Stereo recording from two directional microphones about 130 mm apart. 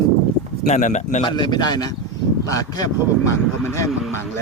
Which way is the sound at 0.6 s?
65° left (ahead or behind).